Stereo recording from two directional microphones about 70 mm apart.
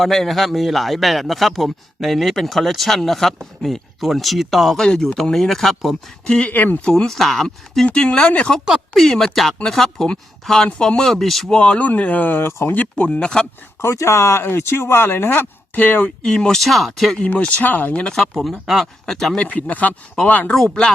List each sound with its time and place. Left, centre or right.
0.0 s a man's voice: centre
6.5 s speech: left
6.8 s a man's voice: centre
8.9 s a man's voice: centre; by 12.7 s left
12.7 s speech: left
13.8 s speech: left
16.2 s a man's voice: centre
17.2 s a man's voice: left; by 19.4 s centre
19.4 s speech: left
20.5 s a man's voice: centre